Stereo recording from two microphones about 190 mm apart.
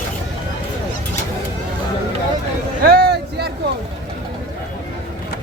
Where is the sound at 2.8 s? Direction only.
55° right (ahead or behind).